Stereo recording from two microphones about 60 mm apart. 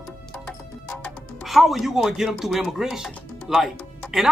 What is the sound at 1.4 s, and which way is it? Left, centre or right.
Speech, centre.